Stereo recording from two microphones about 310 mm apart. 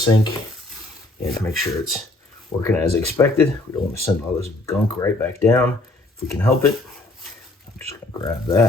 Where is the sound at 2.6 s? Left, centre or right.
Centre.